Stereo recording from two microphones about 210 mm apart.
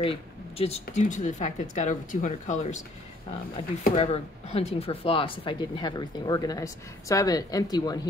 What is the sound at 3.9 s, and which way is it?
Speech, 30° left (ahead or behind).